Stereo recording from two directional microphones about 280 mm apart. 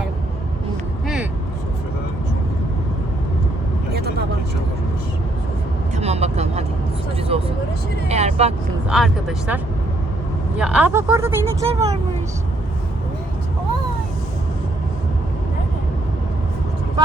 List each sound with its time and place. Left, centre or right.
1.0 s vehicle: centre
6.0 s vehicle: right
8.9 s speech: centre
10.6 s speech: centre
11.7 s speech: right